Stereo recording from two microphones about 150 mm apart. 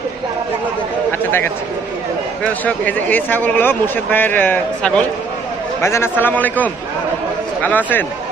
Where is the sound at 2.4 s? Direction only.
10° left (ahead or behind).